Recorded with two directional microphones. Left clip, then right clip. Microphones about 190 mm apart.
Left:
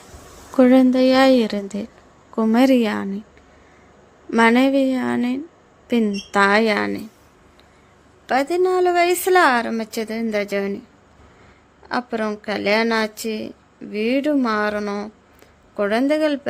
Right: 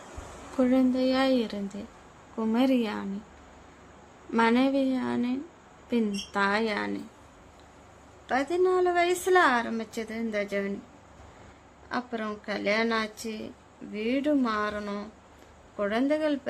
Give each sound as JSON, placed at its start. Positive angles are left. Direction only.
{"t": 0.5, "sound": "a woman's voice", "side_deg": 45}
{"t": 4.3, "sound": "a woman's voice", "side_deg": 35}
{"t": 8.3, "sound": "a woman's voice", "side_deg": 30}
{"t": 11.9, "sound": "a woman's voice", "side_deg": 35}